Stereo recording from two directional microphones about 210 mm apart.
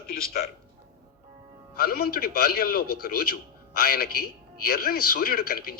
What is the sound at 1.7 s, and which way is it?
A man's voice, 45° left (ahead or behind).